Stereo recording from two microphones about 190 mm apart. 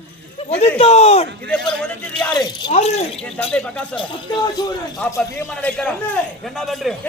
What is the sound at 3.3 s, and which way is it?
Speech, 5° left (ahead or behind).